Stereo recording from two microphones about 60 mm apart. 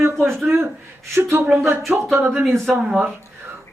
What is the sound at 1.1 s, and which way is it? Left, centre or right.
Speech, right.